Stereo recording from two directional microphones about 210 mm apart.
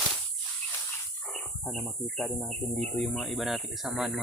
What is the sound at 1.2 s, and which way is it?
Speech, 5° left (ahead or behind).